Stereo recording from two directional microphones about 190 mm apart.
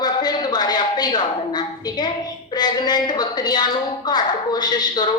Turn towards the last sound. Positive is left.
turn(degrees=20)  # may be behind; listen again after turning